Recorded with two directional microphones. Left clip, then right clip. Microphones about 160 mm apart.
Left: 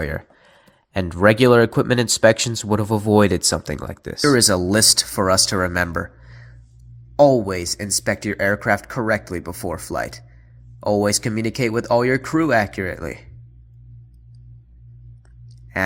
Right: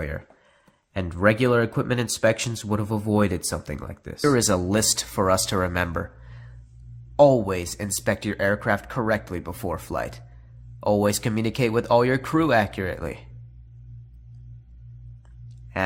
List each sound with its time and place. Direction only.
0.0 s speech: 35° left (ahead or behind)
4.2 s speech: 10° left (ahead or behind)